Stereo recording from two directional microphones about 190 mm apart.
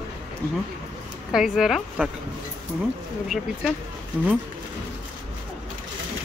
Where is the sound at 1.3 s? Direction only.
Centre (ahead or behind).